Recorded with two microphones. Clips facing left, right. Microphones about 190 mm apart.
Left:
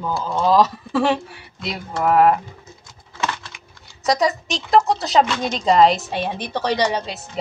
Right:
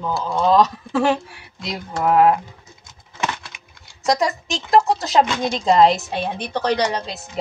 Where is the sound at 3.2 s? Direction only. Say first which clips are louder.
Even; 15° right (ahead or behind).